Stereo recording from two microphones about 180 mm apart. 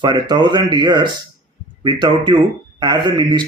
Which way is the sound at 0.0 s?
25° right (ahead or behind).